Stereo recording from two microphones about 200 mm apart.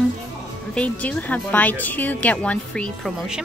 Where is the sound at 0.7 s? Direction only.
5° left (ahead or behind).